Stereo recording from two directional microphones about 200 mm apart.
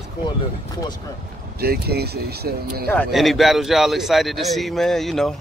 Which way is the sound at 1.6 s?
50° right (ahead or behind).